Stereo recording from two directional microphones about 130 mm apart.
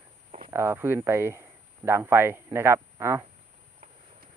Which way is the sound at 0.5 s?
15° right (ahead or behind).